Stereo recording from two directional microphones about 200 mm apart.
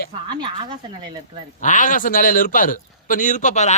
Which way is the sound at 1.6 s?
40° left (ahead or behind).